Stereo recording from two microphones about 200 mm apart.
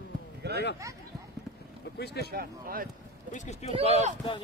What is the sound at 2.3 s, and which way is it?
Speech, 45° right (ahead or behind).